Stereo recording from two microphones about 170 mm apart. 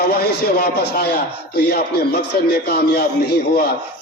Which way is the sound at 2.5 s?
70° left (ahead or behind).